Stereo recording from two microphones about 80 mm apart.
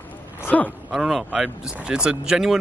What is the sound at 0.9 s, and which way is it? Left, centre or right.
Speech, centre.